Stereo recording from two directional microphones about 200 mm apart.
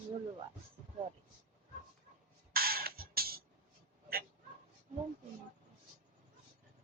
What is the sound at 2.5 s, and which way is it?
Music, 50° right (ahead or behind).